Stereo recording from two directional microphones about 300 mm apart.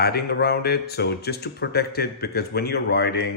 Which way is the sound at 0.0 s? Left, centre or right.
Left.